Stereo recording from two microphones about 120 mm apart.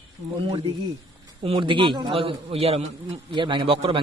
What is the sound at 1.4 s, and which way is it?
A man's voice, 45° right (ahead or behind).